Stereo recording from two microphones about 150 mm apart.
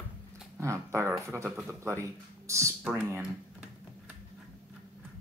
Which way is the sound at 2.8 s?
10° right (ahead or behind).